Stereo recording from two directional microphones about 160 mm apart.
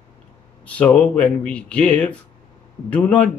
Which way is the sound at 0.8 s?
10° left (ahead or behind).